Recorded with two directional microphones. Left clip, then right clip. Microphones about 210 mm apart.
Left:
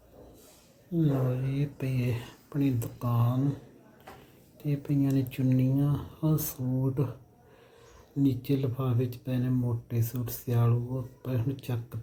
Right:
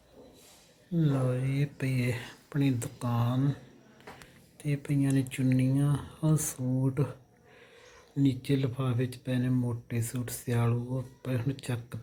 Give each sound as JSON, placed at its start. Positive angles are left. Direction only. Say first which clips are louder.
{"t": 0.9, "sound": "speech", "louder": "left 1 dB", "side_deg": 0}
{"t": 4.6, "sound": "speech", "louder": "left 1 dB", "side_deg": 5}
{"t": 8.2, "sound": "speech", "louder": "left 1 dB", "side_deg": 0}